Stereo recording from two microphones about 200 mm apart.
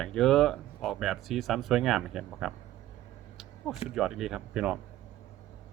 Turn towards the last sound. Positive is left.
turn(degrees=-5)  # may be behind; listen again after turning